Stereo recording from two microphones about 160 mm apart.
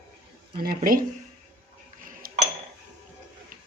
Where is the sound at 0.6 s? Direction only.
65° right (ahead or behind).